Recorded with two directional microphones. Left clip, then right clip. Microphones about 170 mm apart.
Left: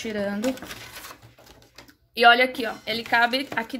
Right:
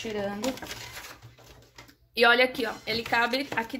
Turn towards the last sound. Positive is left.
turn(degrees=15)  # may be behind; listen again after turning